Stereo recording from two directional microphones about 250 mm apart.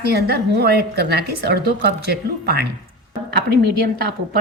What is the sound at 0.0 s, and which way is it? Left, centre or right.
A woman's voice, right.